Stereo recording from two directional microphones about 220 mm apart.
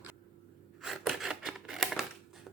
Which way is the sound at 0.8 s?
Centre (ahead or behind).